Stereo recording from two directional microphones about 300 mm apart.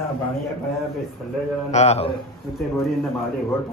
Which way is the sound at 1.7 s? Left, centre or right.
Left.